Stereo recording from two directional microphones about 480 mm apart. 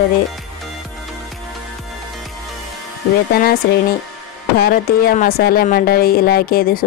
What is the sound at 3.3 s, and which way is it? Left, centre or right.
Speech, centre.